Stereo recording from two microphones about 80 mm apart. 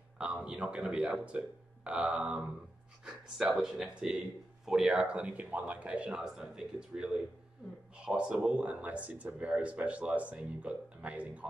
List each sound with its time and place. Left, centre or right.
0.5 s speech: centre
3.3 s speech: centre